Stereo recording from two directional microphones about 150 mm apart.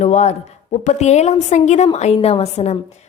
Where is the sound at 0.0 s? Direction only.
50° left (ahead or behind).